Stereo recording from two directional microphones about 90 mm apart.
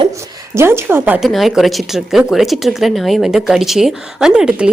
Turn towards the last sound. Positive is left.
turn(degrees=-10)  # may be behind; listen again after turning